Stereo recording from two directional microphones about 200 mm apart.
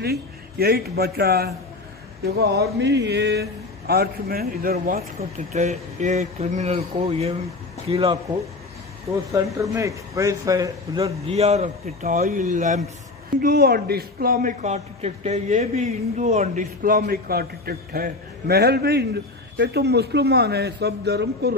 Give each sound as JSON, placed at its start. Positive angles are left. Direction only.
{"t": 0.0, "sound": "a man's voice", "side_deg": -50}
{"t": 5.5, "sound": "a man's voice", "side_deg": -35}
{"t": 9.3, "sound": "a man's voice", "side_deg": -15}
{"t": 11.2, "sound": "a man's voice", "side_deg": -30}
{"t": 13.4, "sound": "a man's voice", "side_deg": -50}